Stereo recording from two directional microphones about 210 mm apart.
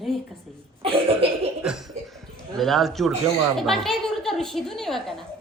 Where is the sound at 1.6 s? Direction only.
Centre (ahead or behind).